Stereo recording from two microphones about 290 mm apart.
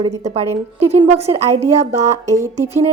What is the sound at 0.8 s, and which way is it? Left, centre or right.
Speech, right.